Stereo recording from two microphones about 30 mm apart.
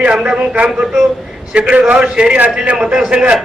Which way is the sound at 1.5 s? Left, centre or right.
Right.